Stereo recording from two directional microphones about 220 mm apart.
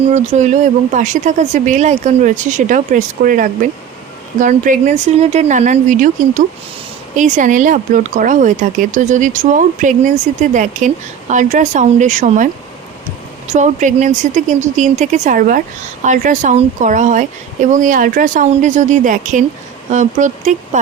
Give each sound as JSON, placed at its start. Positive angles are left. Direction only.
{"t": 0.1, "sound": "speech", "side_deg": -30}
{"t": 13.5, "sound": "speech", "side_deg": -35}